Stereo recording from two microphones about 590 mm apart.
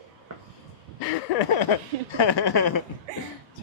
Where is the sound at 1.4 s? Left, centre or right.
Left.